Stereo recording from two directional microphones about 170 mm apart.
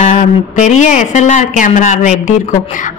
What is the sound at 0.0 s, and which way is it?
Speech, 45° left (ahead or behind).